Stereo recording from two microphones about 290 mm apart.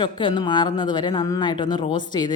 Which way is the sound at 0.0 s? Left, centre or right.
Centre.